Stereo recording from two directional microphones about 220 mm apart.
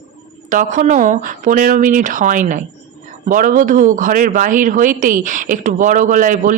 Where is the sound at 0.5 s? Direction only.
35° right (ahead or behind).